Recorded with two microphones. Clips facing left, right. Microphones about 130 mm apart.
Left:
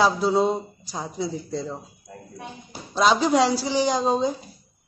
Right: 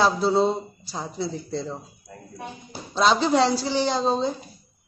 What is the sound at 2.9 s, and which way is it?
A man's voice, 10° left (ahead or behind).